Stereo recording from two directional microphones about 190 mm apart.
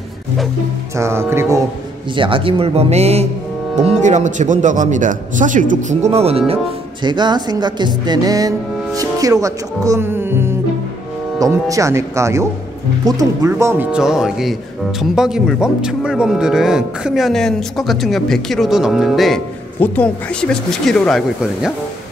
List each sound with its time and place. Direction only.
0.9 s speech: 15° right (ahead or behind)
2.1 s speech: 25° right (ahead or behind)
11.7 s speech: 15° right (ahead or behind); by 21.7 s centre (ahead or behind)